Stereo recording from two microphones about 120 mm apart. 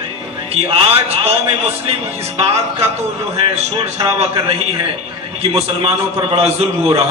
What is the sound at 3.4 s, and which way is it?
Speech, 55° right (ahead or behind).